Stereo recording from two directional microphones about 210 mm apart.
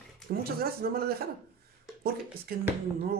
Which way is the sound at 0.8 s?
45° right (ahead or behind).